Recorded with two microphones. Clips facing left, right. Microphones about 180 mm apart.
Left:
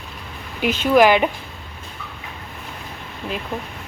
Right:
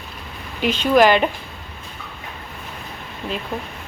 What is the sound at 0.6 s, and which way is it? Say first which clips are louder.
Speech: even; 10° left (ahead or behind).